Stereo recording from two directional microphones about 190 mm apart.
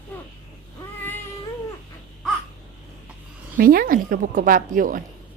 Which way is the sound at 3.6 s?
50° right (ahead or behind).